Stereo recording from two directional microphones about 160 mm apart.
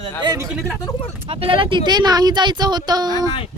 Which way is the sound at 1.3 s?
35° right (ahead or behind).